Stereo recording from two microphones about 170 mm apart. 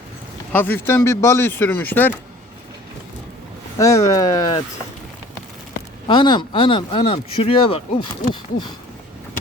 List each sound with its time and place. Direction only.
0.5 s speech: 10° left (ahead or behind)
3.8 s speech: 20° left (ahead or behind)
6.1 s speech: 25° left (ahead or behind)